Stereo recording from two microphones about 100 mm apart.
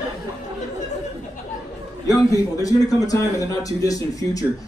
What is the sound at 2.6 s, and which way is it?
A man's voice, 35° left (ahead or behind).